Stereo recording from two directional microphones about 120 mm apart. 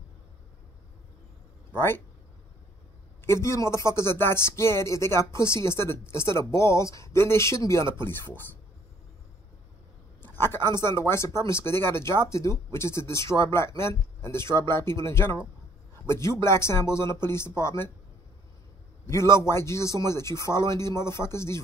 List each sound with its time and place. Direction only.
3.3 s speech: 25° left (ahead or behind)
10.2 s a sound: 20° left (ahead or behind)
10.8 s speech: 20° left (ahead or behind)
16.4 s speech: 20° left (ahead or behind)
19.0 s speech: 25° left (ahead or behind)